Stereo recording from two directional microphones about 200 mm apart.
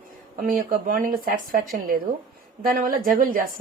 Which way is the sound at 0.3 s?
45° right (ahead or behind).